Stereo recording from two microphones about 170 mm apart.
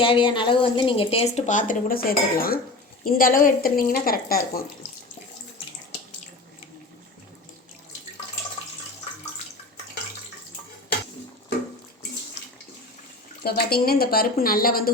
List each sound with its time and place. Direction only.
0.0 s a woman's voice: 30° left (ahead or behind); by 4.6 s 60° left (ahead or behind)
13.4 s a woman's voice: 65° left (ahead or behind)